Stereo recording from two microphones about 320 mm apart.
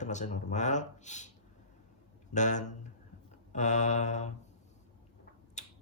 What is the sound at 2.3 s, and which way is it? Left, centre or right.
Speech, left.